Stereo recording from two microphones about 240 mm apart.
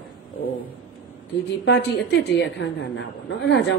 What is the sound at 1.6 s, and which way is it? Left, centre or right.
A woman's voice, left.